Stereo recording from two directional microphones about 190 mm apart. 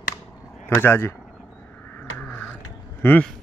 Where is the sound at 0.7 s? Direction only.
10° left (ahead or behind).